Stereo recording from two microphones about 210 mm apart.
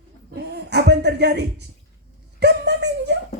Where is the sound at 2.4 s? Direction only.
55° right (ahead or behind).